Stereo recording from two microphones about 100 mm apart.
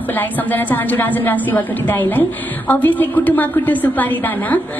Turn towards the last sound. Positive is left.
turn(degrees=15)  # may be behind; listen again after turning